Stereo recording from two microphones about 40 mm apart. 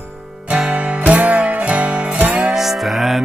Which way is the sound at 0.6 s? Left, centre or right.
Right.